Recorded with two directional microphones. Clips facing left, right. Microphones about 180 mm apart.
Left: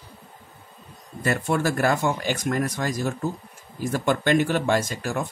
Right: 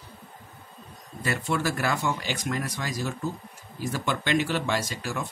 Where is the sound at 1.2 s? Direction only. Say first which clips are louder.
Left 4 dB; 50° left (ahead or behind).